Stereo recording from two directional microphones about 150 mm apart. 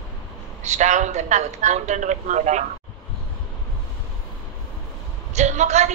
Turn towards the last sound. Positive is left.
turn(degrees=-50)  # may be behind; listen again after turning